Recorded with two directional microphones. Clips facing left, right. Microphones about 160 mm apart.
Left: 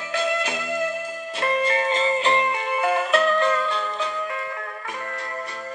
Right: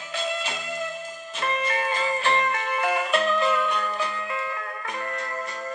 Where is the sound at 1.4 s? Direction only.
30° left (ahead or behind); by 4.1 s 10° right (ahead or behind).